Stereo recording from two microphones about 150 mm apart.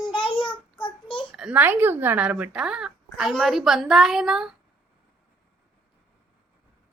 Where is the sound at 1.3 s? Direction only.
5° right (ahead or behind).